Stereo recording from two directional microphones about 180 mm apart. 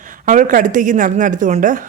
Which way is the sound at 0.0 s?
45° right (ahead or behind).